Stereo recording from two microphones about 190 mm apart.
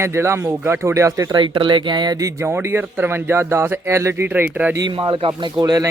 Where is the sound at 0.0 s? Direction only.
15° right (ahead or behind).